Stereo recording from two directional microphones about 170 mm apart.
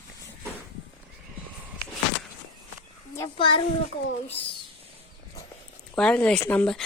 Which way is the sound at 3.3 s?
30° left (ahead or behind).